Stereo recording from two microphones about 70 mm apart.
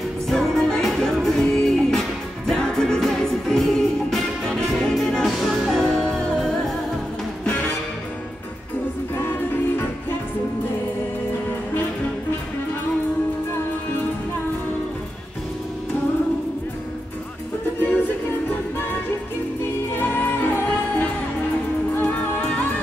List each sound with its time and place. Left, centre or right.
0.3 s music: centre
18.5 s music: left
20.0 s music: left